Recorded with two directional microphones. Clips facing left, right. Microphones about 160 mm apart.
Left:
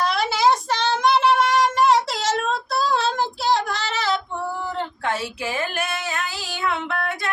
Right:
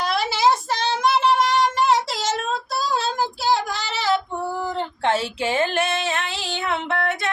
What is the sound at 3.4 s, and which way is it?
Female singing, 5° right (ahead or behind).